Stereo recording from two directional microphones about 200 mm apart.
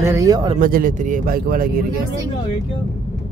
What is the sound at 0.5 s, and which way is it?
A man's voice, 45° right (ahead or behind).